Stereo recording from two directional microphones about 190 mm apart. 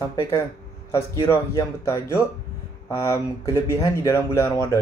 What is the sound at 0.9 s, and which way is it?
Speech, 15° left (ahead or behind).